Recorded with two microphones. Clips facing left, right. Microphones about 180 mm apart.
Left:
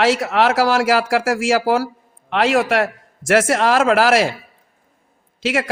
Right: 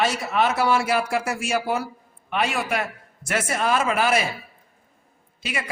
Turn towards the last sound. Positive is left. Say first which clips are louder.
# left 11 dB
turn(degrees=90)